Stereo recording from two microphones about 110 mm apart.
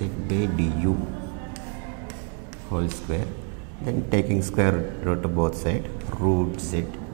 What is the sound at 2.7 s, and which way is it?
Speech, 20° right (ahead or behind).